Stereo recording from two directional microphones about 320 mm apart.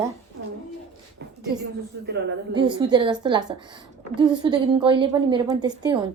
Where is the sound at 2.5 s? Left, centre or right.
Centre.